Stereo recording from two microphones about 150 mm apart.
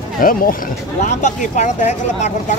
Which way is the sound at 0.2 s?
70° left (ahead or behind).